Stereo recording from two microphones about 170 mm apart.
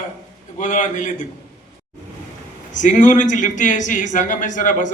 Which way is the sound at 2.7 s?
45° left (ahead or behind).